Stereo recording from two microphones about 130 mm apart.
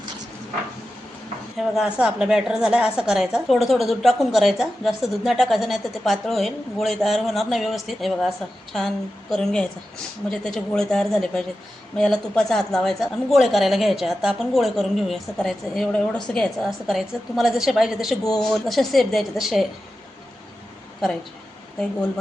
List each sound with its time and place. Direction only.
1.5 s a woman's voice: 5° right (ahead or behind)
9.3 s a woman's voice: 5° left (ahead or behind)